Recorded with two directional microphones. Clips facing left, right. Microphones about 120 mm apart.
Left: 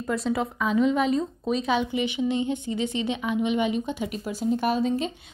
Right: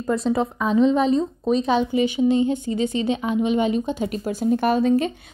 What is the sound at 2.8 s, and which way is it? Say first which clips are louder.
Speech: right 5 dB; 20° left (ahead or behind).